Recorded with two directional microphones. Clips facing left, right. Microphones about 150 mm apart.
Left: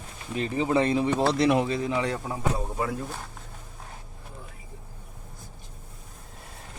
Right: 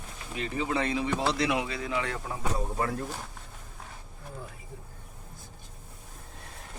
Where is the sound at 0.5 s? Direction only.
25° left (ahead or behind).